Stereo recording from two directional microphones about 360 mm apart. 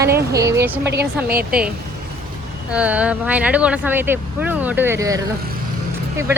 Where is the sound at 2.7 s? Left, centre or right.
Centre.